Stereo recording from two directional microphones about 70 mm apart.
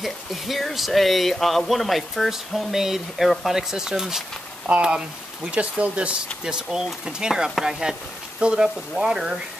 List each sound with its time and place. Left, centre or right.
0.0 s speech: centre